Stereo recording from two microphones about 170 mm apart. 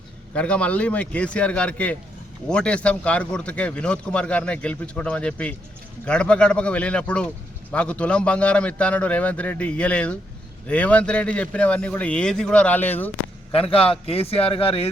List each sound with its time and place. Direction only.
0.3 s a man's voice: 5° left (ahead or behind)
13.5 s a man's voice: 35° left (ahead or behind)